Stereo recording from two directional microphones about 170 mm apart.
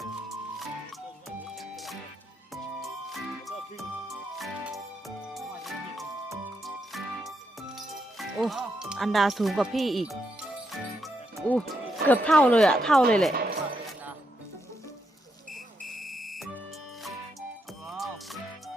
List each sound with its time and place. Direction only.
1.5 s music: centre (ahead or behind)
7.8 s speech: centre (ahead or behind)
10.7 s music: centre (ahead or behind)
12.0 s speech: 10° left (ahead or behind)
13.3 s music: 60° right (ahead or behind)
15.9 s music: centre (ahead or behind)
17.8 s music: centre (ahead or behind)